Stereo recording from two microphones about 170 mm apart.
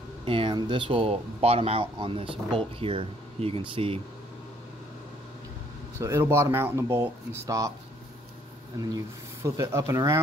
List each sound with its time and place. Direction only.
0.2 s speech: 30° right (ahead or behind)
5.9 s speech: 15° right (ahead or behind)
8.8 s speech: 20° right (ahead or behind)